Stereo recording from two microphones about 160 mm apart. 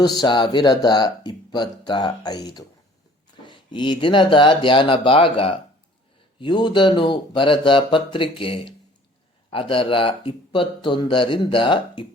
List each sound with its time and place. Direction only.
0.0 s speech: 25° left (ahead or behind)